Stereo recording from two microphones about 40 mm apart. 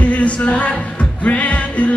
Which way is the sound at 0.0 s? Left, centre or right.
Left.